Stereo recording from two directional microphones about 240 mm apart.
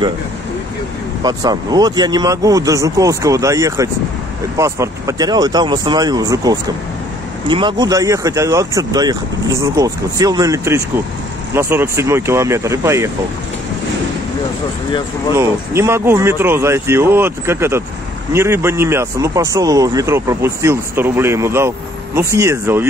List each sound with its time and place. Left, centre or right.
1.2 s a man's voice: centre
14.9 s speech: centre
15.3 s a man's voice: centre